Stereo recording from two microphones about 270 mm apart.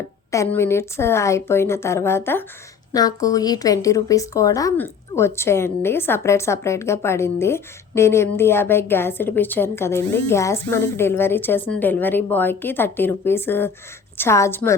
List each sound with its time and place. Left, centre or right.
0.3 s a woman's voice: centre